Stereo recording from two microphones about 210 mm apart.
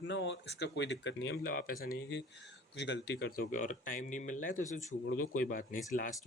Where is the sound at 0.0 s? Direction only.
60° left (ahead or behind).